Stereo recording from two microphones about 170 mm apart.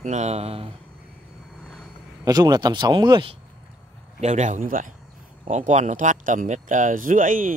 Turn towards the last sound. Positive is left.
turn(degrees=-55)  # may be behind; listen again after turning